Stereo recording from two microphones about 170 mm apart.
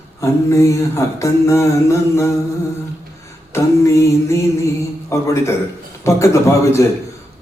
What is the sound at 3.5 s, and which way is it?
Mantra, 15° left (ahead or behind).